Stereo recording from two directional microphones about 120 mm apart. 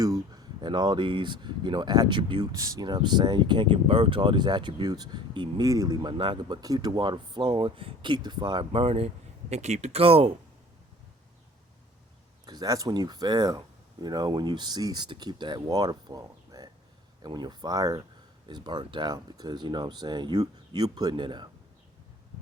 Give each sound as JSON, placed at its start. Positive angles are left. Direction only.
{"t": 0.0, "sound": "speech", "side_deg": -30}
{"t": 12.5, "sound": "speech", "side_deg": -35}